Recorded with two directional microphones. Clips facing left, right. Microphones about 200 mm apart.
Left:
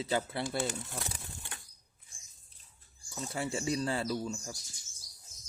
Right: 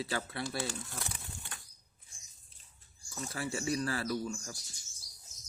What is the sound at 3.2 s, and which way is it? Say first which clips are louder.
Speech: left 2 dB; 25° left (ahead or behind).